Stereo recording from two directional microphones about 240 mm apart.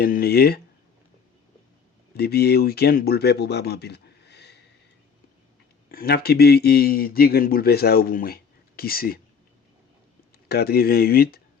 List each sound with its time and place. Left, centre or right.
0.0 s a man's voice: left
2.1 s speech: left
5.9 s a man's voice: left
10.5 s a man's voice: left